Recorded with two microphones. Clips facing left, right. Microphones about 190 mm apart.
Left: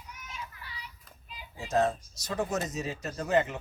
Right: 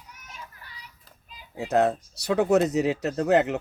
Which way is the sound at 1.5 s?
60° right (ahead or behind).